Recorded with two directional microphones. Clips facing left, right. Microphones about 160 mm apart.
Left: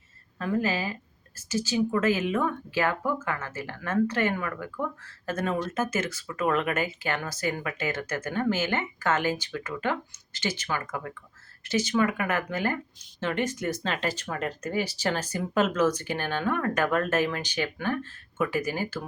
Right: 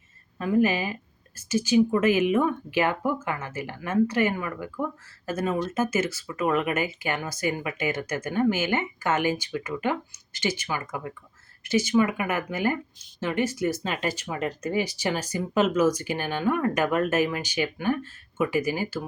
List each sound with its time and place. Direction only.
0.3 s speech: 15° right (ahead or behind)